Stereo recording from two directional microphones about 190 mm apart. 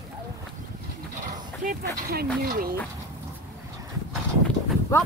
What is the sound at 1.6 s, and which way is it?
Speech, 45° right (ahead or behind).